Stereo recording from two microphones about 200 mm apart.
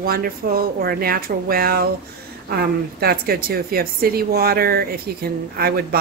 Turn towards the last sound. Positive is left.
turn(degrees=-50)  # may be behind; listen again after turning